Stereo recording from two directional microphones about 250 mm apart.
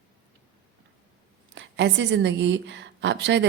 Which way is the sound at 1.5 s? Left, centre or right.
Right.